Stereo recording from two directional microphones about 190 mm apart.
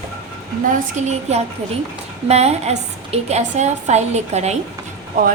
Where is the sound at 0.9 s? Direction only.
35° right (ahead or behind).